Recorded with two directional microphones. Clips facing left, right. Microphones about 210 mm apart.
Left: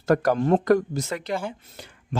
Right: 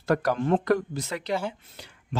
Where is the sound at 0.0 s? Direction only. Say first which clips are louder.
Left 4 dB; 45° left (ahead or behind).